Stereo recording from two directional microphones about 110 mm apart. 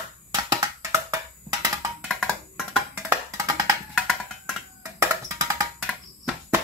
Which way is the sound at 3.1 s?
30° right (ahead or behind).